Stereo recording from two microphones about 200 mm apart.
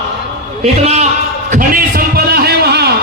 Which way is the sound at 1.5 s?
45° right (ahead or behind).